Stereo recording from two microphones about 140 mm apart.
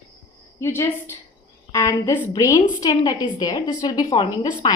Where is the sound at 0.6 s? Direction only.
20° left (ahead or behind).